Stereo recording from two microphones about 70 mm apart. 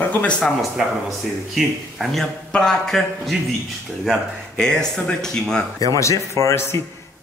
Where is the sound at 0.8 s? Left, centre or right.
Centre.